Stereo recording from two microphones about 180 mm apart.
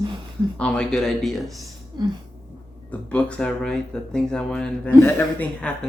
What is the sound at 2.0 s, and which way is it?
Cough, 25° right (ahead or behind).